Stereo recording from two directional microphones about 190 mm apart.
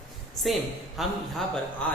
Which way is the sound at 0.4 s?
Centre (ahead or behind).